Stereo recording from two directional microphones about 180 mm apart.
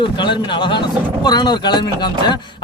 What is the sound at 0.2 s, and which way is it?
Speech, 25° left (ahead or behind).